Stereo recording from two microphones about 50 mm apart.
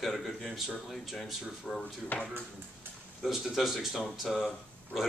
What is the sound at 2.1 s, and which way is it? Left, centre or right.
Speech, left.